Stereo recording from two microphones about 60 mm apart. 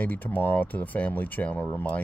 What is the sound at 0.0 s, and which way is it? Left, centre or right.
Speech, left.